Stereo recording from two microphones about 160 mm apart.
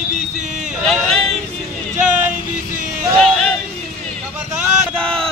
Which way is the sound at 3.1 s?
Centre (ahead or behind).